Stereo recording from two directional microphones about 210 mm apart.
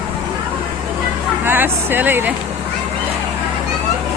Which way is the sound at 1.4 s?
10° right (ahead or behind).